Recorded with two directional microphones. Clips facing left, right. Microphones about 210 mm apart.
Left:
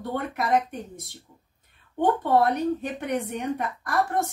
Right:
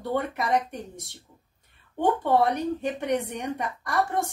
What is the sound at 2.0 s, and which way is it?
A woman's voice, centre (ahead or behind).